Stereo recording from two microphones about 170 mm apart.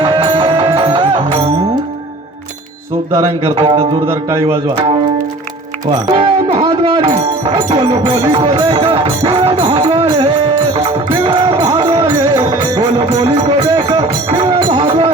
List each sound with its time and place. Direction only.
0.0 s music: 30° right (ahead or behind)
4.0 s a man's voice: 15° right (ahead or behind)
4.4 s music: 30° right (ahead or behind)
6.1 s music: 35° right (ahead or behind)
12.0 s music: 15° right (ahead or behind); by 15.1 s 35° right (ahead or behind)